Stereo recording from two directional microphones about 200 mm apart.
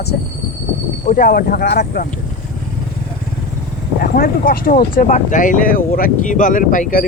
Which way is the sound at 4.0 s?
50° left (ahead or behind).